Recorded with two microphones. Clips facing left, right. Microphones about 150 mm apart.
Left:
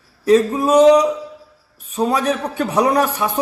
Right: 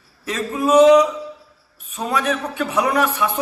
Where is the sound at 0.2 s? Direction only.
35° left (ahead or behind).